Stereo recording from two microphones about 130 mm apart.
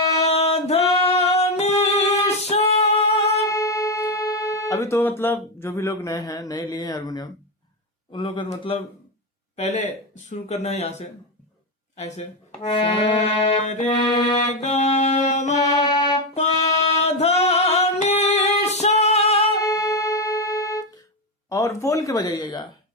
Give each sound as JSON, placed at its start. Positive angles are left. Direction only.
{"t": 0.2, "sound": "singing", "side_deg": 55}
{"t": 1.8, "sound": "music", "side_deg": 55}
{"t": 3.4, "sound": "speech", "side_deg": 25}
{"t": 8.1, "sound": "music", "side_deg": 40}
{"t": 9.6, "sound": "speech", "side_deg": 60}
{"t": 12.7, "sound": "music", "side_deg": 45}
{"t": 13.1, "sound": "speech", "side_deg": 50}
{"t": 13.8, "sound": "music", "side_deg": 35}
{"t": 14.3, "sound": "speech", "side_deg": 55}
{"t": 15.8, "sound": "music", "side_deg": 30}
{"t": 16.6, "sound": "music", "side_deg": 55}
{"t": 19.6, "sound": "music", "side_deg": 25}
{"t": 21.5, "sound": "speech", "side_deg": 25}